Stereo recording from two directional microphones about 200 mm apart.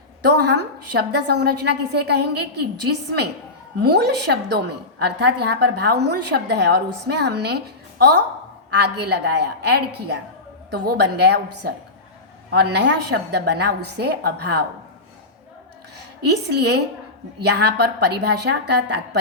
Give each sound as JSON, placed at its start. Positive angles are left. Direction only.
{"t": 0.3, "sound": "a woman's voice", "side_deg": -55}
{"t": 16.2, "sound": "a woman's voice", "side_deg": -55}